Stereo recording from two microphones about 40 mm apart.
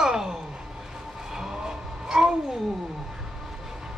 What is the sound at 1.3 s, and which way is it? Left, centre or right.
Vehicle, centre.